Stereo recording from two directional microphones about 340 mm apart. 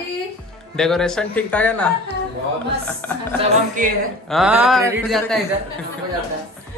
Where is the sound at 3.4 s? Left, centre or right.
Right.